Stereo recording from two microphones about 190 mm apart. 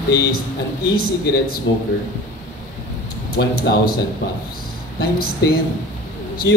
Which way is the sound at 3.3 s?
55° left (ahead or behind).